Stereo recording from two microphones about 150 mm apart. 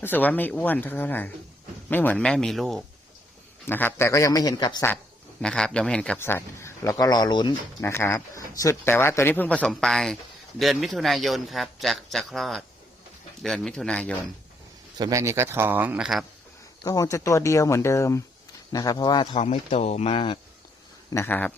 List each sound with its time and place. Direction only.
0.0 s a man's voice: 10° left (ahead or behind)
3.7 s speech: 15° left (ahead or behind)
5.4 s speech: 5° left (ahead or behind); by 7.5 s 30° left (ahead or behind)
7.8 s a man's voice: 15° left (ahead or behind)
14.9 s a man's voice: 25° right (ahead or behind); by 16.2 s 5° right (ahead or behind)
16.8 s speech: 25° left (ahead or behind)
19.5 s speech: 45° left (ahead or behind)
21.1 s speech: 15° left (ahead or behind)